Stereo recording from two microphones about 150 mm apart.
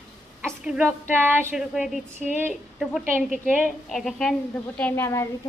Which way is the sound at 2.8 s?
5° right (ahead or behind).